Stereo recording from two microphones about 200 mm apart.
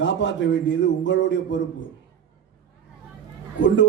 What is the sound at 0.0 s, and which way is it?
A man's voice, 65° left (ahead or behind).